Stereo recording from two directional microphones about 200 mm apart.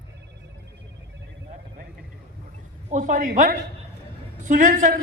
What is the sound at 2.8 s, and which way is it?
A man's voice, 40° right (ahead or behind).